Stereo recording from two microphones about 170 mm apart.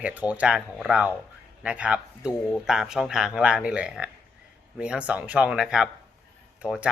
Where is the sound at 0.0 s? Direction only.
10° right (ahead or behind).